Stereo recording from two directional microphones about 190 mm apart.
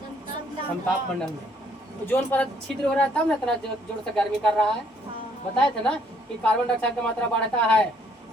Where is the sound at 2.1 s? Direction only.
10° left (ahead or behind).